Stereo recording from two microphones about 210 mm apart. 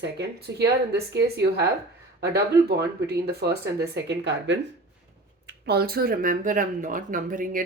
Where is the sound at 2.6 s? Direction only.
50° right (ahead or behind).